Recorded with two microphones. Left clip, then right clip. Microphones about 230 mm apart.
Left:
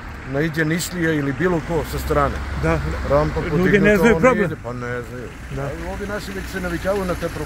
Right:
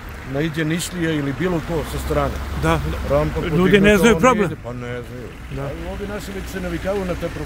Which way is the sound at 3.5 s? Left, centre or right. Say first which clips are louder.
Right 1 dB; centre.